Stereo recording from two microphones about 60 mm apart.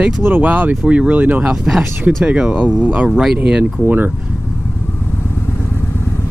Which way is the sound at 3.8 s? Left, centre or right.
Right.